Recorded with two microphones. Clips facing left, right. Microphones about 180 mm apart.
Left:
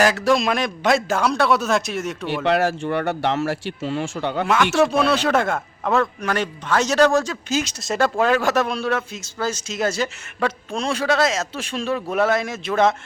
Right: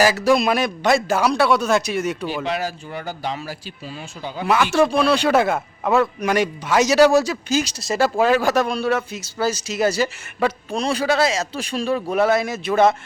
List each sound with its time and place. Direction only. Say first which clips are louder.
0.0 s a man's voice: right 1 dB; 5° right (ahead or behind)
2.4 s speech: left 6 dB; 65° left (ahead or behind)
4.4 s a man's voice: right 2 dB; 5° right (ahead or behind)